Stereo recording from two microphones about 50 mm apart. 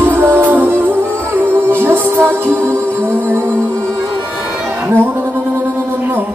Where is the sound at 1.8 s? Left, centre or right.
Right.